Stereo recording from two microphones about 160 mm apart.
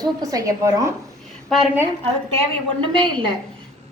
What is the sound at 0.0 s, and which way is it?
Speech, 25° right (ahead or behind).